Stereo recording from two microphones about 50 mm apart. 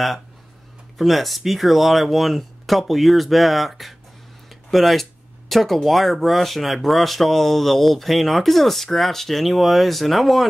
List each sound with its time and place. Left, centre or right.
0.9 s speech: centre
4.5 s a sound: centre
5.5 s speech: centre